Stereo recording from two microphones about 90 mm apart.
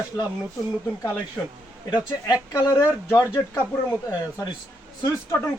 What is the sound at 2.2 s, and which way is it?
Speech, 35° left (ahead or behind).